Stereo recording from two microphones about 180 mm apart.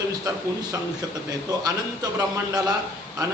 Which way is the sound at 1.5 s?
20° right (ahead or behind).